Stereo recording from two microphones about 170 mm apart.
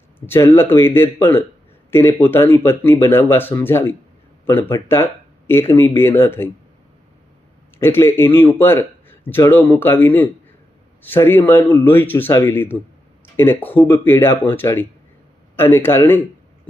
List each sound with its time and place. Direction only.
0.3 s a man's voice: 15° left (ahead or behind)
7.8 s a man's voice: 15° left (ahead or behind)